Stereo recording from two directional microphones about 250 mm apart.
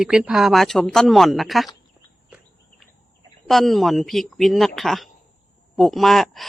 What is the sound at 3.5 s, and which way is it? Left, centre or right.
A woman's voice, centre.